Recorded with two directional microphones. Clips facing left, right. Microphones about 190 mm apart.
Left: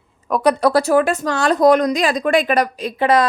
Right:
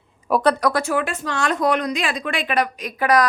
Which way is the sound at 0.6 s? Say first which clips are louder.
Left 6 dB; 35° left (ahead or behind).